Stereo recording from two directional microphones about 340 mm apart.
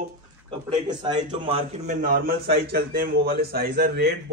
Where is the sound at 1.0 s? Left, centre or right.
Centre.